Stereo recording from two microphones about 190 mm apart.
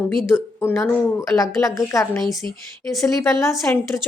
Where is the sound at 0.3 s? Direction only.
10° left (ahead or behind).